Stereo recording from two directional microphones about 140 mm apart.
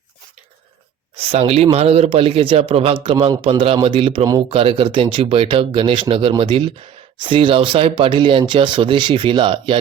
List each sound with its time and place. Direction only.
1.1 s speech: 45° right (ahead or behind)